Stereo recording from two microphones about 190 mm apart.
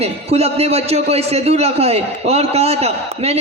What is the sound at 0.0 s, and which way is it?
A man's voice, 35° right (ahead or behind).